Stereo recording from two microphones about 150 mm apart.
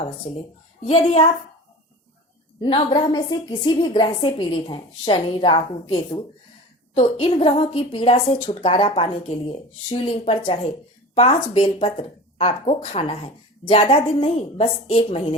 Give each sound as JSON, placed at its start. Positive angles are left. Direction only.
{"t": 0.3, "sound": "speech", "side_deg": 50}
{"t": 0.9, "sound": "speech", "side_deg": 40}
{"t": 2.6, "sound": "speech", "side_deg": 35}